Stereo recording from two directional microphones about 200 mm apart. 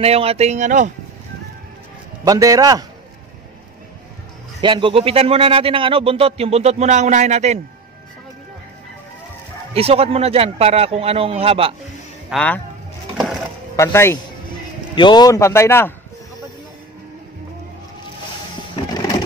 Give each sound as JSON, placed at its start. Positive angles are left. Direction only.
{"t": 0.0, "sound": "speech", "side_deg": -30}
{"t": 2.2, "sound": "a man's voice", "side_deg": -15}
{"t": 4.6, "sound": "speech", "side_deg": -25}
{"t": 9.8, "sound": "speech", "side_deg": -30}
{"t": 12.3, "sound": "a man's voice", "side_deg": 5}
{"t": 13.7, "sound": "a man's voice", "side_deg": 15}